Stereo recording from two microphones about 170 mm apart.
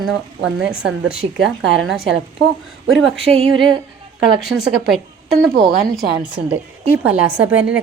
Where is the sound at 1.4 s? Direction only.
90° right.